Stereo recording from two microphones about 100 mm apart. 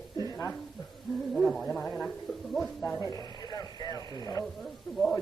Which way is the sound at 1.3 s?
5° left (ahead or behind).